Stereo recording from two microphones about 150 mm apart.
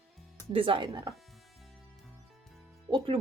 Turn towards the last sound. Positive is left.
turn(degrees=-35)  # may be behind; listen again after turning